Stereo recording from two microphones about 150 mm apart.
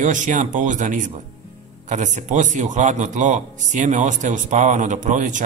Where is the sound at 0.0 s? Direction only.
55° right (ahead or behind).